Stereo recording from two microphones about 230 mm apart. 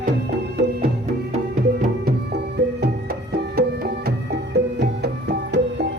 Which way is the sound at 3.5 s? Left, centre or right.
Right.